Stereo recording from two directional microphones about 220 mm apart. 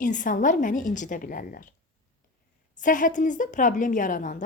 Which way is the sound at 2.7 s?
35° left (ahead or behind).